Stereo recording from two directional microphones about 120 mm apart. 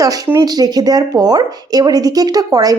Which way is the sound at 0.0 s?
30° right (ahead or behind).